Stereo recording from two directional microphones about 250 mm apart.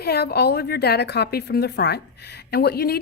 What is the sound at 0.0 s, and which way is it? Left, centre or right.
A woman's voice, left.